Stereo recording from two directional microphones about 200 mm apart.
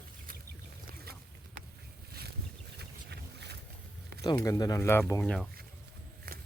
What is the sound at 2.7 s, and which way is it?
Boat, 55° right (ahead or behind).